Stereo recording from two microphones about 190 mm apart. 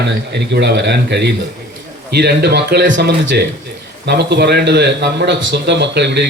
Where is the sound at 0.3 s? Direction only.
65° right (ahead or behind).